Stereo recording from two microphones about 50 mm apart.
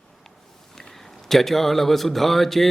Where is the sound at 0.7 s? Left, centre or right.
Centre.